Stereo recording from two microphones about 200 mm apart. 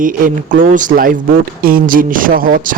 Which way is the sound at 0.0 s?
40° right (ahead or behind).